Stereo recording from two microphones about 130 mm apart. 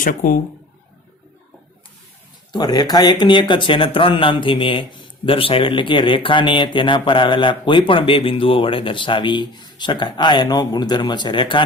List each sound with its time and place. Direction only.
0.0 s speech: 90° left
2.5 s speech: 30° left (ahead or behind)